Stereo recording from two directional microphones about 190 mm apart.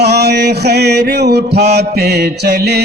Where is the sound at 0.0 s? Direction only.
60° right (ahead or behind).